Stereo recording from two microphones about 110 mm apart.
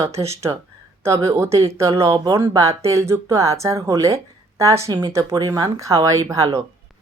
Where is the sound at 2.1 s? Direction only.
40° right (ahead or behind).